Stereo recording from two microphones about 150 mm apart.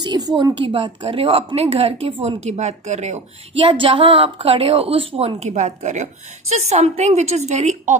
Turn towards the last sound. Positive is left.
turn(degrees=-50)  # may be behind; listen again after turning